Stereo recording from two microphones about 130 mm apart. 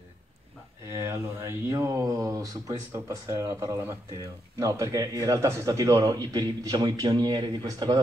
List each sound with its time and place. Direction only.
0.8 s speech: 20° right (ahead or behind)